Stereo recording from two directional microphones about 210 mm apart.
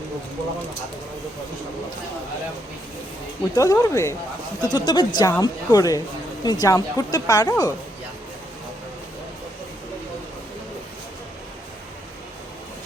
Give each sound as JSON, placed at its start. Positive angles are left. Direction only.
{"t": 3.5, "sound": "speech", "side_deg": 15}